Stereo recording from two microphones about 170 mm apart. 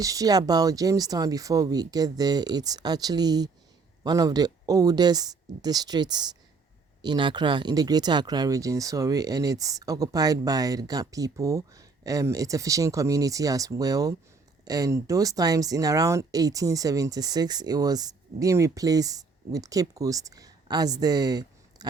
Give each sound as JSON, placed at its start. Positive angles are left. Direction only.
{"t": 0.0, "sound": "speech", "side_deg": -20}